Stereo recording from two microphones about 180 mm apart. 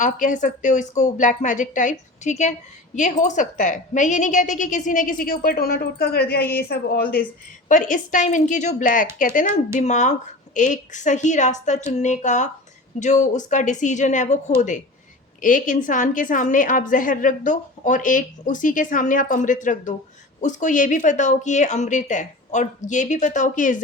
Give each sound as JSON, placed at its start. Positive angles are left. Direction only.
{"t": 0.0, "sound": "a woman's voice", "side_deg": 45}
{"t": 15.4, "sound": "a woman's voice", "side_deg": 45}